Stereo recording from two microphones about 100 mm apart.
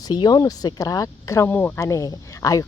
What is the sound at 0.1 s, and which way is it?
Speech, 45° left (ahead or behind).